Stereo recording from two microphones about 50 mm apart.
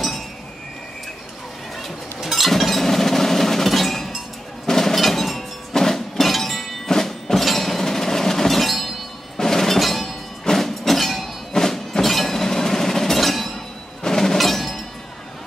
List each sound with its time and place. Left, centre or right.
1.8 s a sound: centre
4.6 s breaking: centre
6.9 s train: centre
9.4 s music: centre
10.4 s train: centre
14.0 s percussion: centre